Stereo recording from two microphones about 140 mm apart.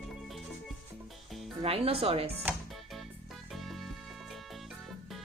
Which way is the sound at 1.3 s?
Centre (ahead or behind).